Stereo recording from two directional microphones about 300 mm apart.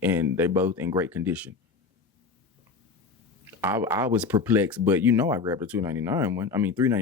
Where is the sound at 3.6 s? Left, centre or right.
Centre.